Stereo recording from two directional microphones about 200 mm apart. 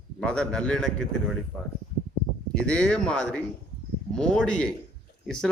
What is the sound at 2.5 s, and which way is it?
A man's voice, 5° left (ahead or behind).